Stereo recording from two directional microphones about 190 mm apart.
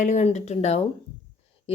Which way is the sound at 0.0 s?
40° left (ahead or behind).